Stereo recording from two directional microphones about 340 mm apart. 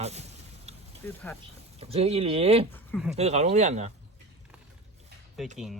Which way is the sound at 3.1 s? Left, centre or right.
Centre.